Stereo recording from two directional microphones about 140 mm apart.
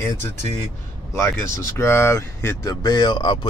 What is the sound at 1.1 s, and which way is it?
Speech, 20° left (ahead or behind).